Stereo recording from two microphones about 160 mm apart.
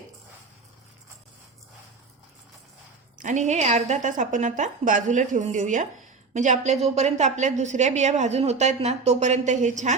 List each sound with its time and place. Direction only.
3.2 s a woman's voice: 50° right (ahead or behind)